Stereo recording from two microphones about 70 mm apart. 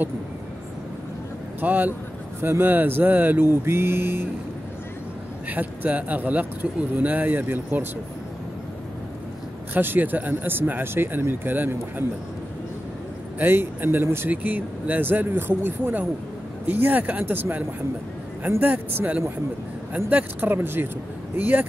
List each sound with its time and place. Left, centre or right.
1.6 s speech: right
3.4 s speech: right
5.5 s speech: right
9.8 s speech: right
13.4 s speech: right